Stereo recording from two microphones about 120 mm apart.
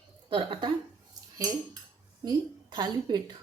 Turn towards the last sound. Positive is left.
turn(degrees=-35)  # may be behind; listen again after turning